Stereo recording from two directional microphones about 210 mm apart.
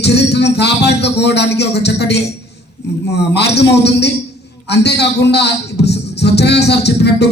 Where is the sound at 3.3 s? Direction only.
55° left (ahead or behind).